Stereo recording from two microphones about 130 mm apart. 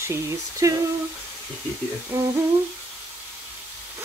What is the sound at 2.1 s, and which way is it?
Speech, 20° right (ahead or behind).